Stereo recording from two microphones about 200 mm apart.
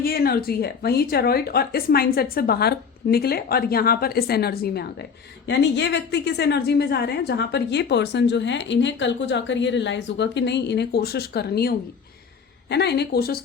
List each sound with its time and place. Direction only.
0.0 s a woman's voice: 50° left (ahead or behind)